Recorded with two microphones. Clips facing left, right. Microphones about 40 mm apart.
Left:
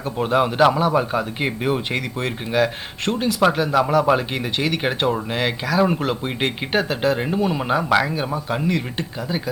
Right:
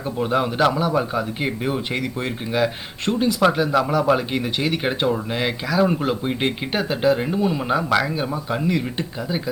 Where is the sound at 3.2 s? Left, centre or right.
Centre.